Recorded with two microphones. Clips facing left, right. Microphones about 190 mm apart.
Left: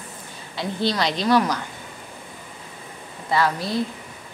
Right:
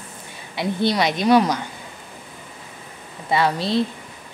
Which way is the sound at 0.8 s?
15° right (ahead or behind).